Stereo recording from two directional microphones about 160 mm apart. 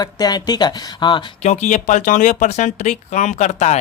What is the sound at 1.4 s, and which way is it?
Speech, 45° left (ahead or behind).